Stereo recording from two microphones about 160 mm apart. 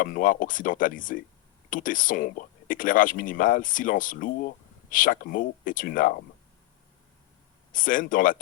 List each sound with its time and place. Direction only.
0.0 s speech: 60° left (ahead or behind)
7.7 s speech: 55° left (ahead or behind)